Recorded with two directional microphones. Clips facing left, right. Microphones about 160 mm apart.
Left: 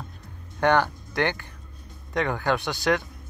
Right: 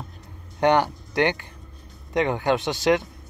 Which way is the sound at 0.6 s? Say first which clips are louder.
Right 2 dB; 20° right (ahead or behind).